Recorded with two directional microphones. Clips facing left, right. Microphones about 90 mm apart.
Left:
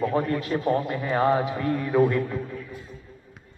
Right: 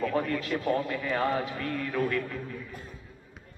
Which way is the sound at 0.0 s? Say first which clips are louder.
Left 4 dB; 30° left (ahead or behind).